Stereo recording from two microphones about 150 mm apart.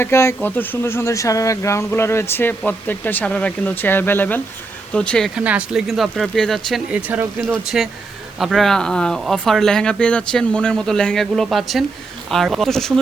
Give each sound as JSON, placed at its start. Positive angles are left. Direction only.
{"t": 0.0, "sound": "speech", "side_deg": 20}
{"t": 5.4, "sound": "speech", "side_deg": -10}
{"t": 7.1, "sound": "speech", "side_deg": -10}
{"t": 7.4, "sound": "speech", "side_deg": 0}